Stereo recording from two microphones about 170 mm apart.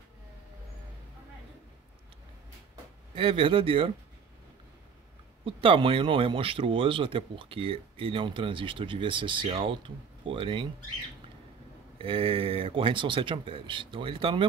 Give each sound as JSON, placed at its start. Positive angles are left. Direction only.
{"t": 2.7, "sound": "speech", "side_deg": -30}
{"t": 5.4, "sound": "speech", "side_deg": -30}
{"t": 12.0, "sound": "speech", "side_deg": -30}